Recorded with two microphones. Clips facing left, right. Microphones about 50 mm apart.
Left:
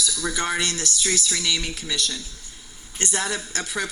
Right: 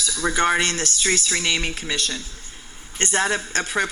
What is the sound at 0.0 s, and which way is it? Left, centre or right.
A woman's voice, right.